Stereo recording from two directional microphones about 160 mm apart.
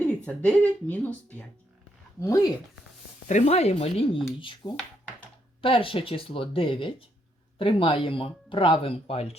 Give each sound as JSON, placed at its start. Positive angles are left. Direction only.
{"t": 0.3, "sound": "speech", "side_deg": 10}
{"t": 3.2, "sound": "speech", "side_deg": 45}